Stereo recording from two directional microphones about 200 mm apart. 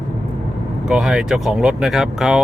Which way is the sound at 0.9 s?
5° right (ahead or behind).